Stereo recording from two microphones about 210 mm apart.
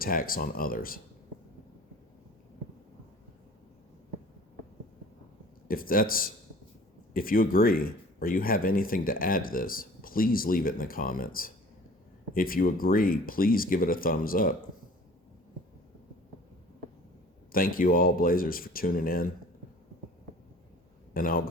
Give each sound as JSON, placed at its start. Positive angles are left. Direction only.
{"t": 0.0, "sound": "speech", "side_deg": 45}
{"t": 5.6, "sound": "speech", "side_deg": 45}
{"t": 17.5, "sound": "speech", "side_deg": 45}
{"t": 21.1, "sound": "a man's voice", "side_deg": 45}